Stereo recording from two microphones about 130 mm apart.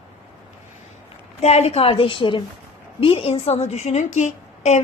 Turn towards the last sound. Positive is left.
turn(degrees=65)  # may be behind; listen again after turning